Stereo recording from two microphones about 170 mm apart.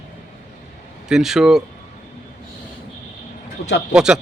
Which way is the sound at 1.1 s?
5° right (ahead or behind).